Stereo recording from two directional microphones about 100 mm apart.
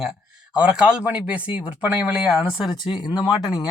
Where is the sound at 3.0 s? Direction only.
40° left (ahead or behind).